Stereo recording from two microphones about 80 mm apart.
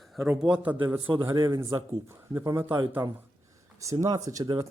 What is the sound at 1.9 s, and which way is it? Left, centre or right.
Speech, right.